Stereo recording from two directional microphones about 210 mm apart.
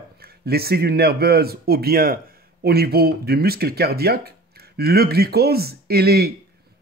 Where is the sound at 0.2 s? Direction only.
50° right (ahead or behind).